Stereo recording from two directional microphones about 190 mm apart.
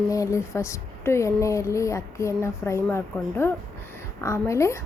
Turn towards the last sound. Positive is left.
turn(degrees=15)  # may be behind; listen again after turning